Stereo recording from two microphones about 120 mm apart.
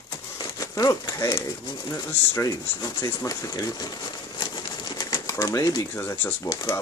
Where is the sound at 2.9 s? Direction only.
30° left (ahead or behind).